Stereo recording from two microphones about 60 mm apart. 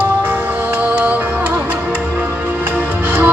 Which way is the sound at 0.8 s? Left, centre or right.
Right.